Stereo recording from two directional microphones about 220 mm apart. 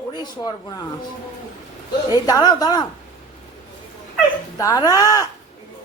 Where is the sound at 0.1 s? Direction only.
20° left (ahead or behind).